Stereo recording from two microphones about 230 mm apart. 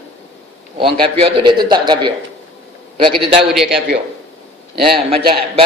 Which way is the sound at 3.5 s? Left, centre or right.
Centre.